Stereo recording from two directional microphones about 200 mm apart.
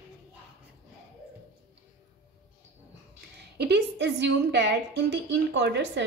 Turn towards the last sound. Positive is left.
turn(degrees=-60)  # may be behind; listen again after turning